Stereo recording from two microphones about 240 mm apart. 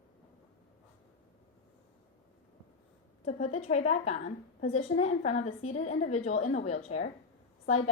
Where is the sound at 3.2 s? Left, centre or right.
Left.